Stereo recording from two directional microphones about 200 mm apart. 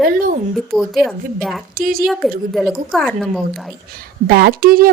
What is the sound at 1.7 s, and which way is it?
Speech, 45° right (ahead or behind).